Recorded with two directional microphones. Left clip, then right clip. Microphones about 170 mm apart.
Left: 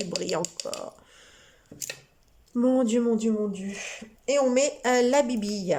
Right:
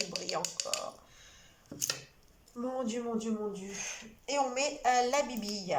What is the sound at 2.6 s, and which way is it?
A woman's voice, 50° left (ahead or behind).